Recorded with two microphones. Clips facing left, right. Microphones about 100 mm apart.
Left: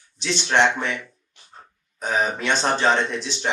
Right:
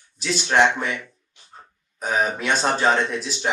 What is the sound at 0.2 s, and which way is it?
Speech, 5° right (ahead or behind).